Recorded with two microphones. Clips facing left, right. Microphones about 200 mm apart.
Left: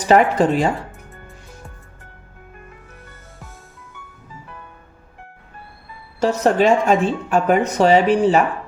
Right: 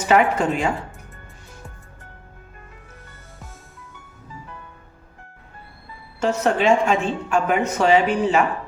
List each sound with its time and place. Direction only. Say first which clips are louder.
0.0 s a woman's voice: left 4 dB; 35° left (ahead or behind)
6.1 s a woman's voice: left 4 dB; 35° left (ahead or behind)